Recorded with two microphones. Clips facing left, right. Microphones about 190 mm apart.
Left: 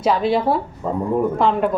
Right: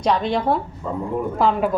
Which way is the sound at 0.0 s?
5° left (ahead or behind).